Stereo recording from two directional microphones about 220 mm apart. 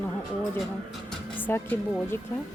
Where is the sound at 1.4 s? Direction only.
10° left (ahead or behind).